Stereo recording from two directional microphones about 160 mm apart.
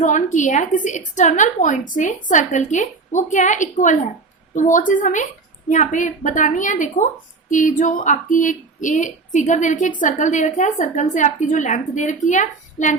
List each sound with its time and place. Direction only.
0.0 s a woman's voice: 50° left (ahead or behind)